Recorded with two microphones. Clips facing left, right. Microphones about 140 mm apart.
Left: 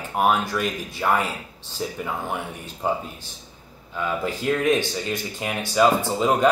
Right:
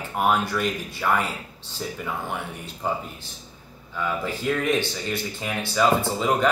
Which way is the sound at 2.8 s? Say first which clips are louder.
Left 3 dB; 15° left (ahead or behind).